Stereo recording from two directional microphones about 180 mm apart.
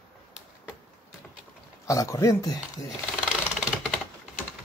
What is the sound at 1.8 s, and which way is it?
Speech, 20° left (ahead or behind).